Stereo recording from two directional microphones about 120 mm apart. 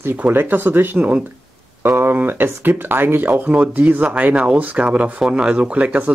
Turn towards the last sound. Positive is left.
turn(degrees=-10)  # may be behind; listen again after turning